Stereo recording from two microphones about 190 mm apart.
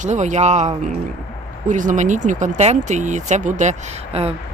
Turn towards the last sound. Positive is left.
turn(degrees=-30)  # may be behind; listen again after turning